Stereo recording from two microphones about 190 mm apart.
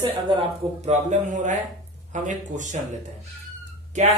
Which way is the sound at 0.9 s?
40° right (ahead or behind).